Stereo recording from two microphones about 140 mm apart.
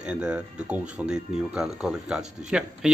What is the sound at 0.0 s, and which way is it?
Speech, 10° right (ahead or behind).